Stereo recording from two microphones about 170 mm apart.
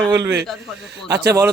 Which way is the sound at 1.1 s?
75° right (ahead or behind).